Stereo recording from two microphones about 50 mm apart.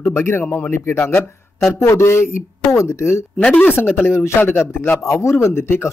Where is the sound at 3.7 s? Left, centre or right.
Left.